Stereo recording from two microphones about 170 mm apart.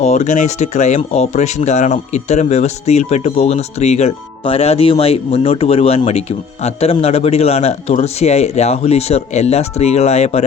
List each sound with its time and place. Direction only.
0.0 s speech: 40° left (ahead or behind)